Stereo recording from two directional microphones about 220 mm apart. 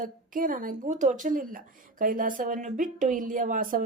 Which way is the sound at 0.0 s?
40° right (ahead or behind).